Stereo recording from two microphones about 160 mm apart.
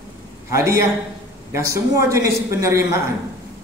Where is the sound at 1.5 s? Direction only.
15° right (ahead or behind).